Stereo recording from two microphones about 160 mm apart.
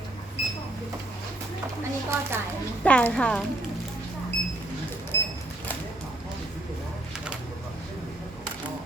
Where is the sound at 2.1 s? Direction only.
15° right (ahead or behind).